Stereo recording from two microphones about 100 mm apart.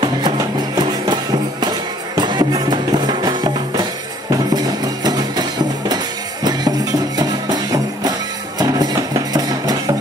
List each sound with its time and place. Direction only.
0.7 s music: 45° right (ahead or behind)